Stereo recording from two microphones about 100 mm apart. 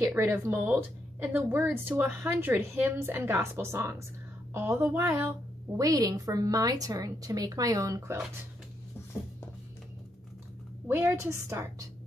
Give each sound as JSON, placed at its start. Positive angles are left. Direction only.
{"t": 0.1, "sound": "a woman's voice", "side_deg": -20}
{"t": 5.8, "sound": "a woman's voice", "side_deg": -40}
{"t": 10.9, "sound": "a woman's voice", "side_deg": -20}